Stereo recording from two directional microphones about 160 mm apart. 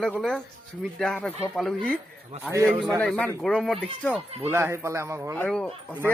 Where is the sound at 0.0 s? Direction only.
5° left (ahead or behind).